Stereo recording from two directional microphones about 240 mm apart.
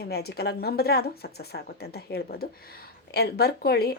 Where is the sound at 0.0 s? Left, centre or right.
Left.